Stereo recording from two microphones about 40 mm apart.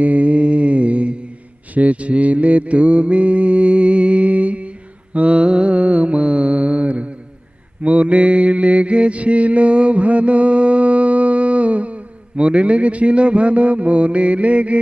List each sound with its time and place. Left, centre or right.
0.0 s mantra: right